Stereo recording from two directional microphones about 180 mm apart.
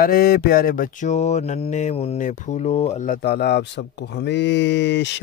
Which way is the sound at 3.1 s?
65° left (ahead or behind).